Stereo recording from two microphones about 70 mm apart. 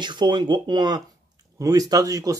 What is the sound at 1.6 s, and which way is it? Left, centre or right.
Speech, right.